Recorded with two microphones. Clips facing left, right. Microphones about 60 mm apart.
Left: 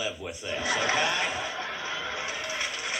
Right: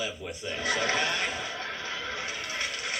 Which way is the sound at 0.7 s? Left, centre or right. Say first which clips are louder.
Left 1 dB; left.